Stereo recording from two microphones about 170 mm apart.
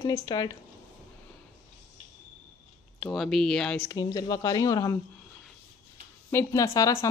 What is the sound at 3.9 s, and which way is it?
Speech, 20° left (ahead or behind).